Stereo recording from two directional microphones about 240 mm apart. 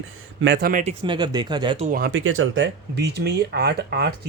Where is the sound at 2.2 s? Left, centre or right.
Right.